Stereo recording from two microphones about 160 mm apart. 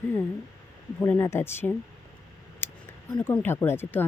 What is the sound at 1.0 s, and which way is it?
Speech, 15° left (ahead or behind).